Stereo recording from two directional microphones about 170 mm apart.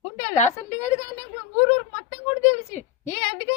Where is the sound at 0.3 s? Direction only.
40° left (ahead or behind).